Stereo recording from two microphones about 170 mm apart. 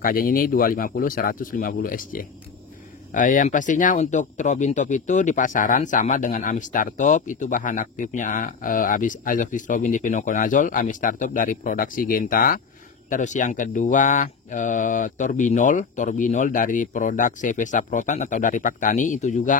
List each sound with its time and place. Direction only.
0.0 s speech: 55° left (ahead or behind)
13.1 s speech: 45° left (ahead or behind)